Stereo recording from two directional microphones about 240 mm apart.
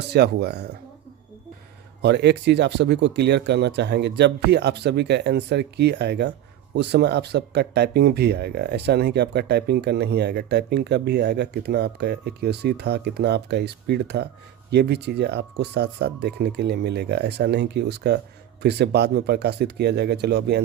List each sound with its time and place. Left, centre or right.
0.1 s speech: right
2.0 s speech: right